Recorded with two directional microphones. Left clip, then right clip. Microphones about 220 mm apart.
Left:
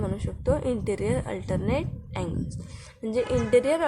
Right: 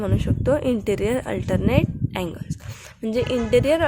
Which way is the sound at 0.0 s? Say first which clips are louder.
Right 6 dB; 35° right (ahead or behind).